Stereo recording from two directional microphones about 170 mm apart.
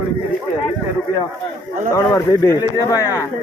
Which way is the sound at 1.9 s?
15° left (ahead or behind).